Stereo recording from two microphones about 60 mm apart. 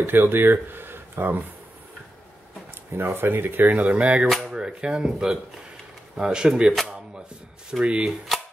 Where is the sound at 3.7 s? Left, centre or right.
Right.